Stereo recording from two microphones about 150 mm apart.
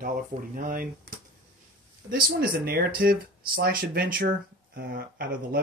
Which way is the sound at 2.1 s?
80° right.